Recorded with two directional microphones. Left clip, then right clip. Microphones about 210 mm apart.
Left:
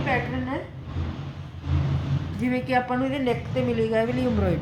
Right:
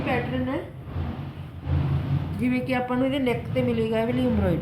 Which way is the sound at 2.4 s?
10° left (ahead or behind).